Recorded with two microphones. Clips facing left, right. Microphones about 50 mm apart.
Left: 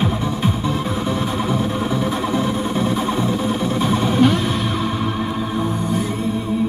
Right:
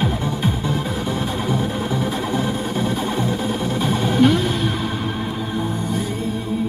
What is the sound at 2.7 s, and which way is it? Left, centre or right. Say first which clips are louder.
Music: left 2 dB; left.